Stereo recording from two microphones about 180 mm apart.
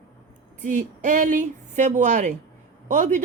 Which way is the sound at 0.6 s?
45° right (ahead or behind).